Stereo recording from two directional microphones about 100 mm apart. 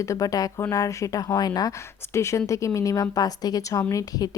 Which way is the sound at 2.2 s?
30° left (ahead or behind).